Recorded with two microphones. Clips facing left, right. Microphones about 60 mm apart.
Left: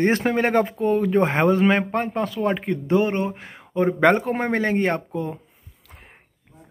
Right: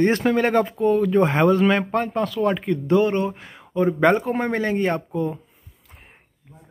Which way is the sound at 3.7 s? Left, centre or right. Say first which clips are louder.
Even; left.